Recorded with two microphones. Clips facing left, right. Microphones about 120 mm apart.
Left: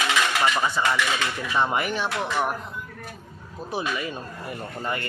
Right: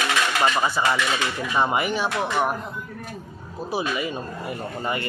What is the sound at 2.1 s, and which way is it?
Speech, 15° right (ahead or behind).